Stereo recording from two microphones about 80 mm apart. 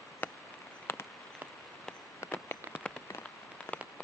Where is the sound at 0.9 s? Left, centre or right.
Left.